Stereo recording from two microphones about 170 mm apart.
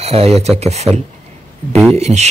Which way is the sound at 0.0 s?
35° right (ahead or behind).